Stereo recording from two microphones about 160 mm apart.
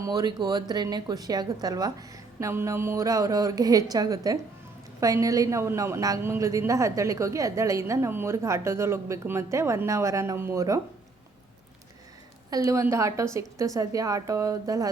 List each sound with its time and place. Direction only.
0.0 s a woman's voice: 25° right (ahead or behind)
12.5 s a woman's voice: 20° right (ahead or behind)